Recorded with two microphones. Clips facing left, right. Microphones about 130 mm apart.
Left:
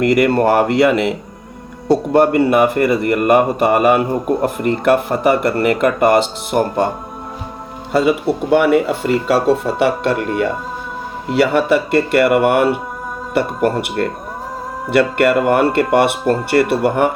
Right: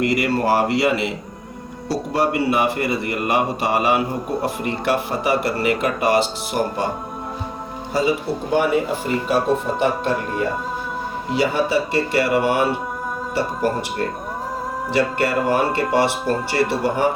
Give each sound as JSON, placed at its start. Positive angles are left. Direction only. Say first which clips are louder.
{"t": 0.0, "sound": "a man's voice", "louder": "left 6 dB", "side_deg": 55}
{"t": 7.9, "sound": "speech", "louder": "left 6 dB", "side_deg": 65}
{"t": 11.3, "sound": "speech", "louder": "left 6 dB", "side_deg": 65}